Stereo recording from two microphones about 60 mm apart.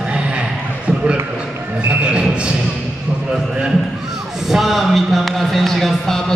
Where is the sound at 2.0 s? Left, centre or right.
Centre.